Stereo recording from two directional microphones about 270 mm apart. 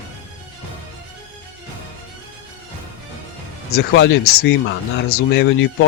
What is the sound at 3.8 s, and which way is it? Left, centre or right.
Speech, left.